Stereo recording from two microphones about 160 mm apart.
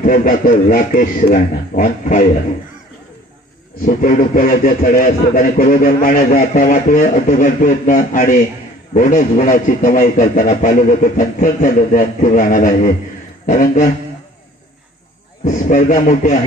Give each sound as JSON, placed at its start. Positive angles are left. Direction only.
{"t": 0.0, "sound": "a man's voice", "side_deg": 60}
{"t": 3.8, "sound": "a man's voice", "side_deg": 60}
{"t": 15.4, "sound": "a man's voice", "side_deg": 50}